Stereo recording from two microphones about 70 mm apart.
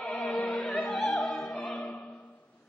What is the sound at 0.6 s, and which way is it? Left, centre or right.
Opera, centre.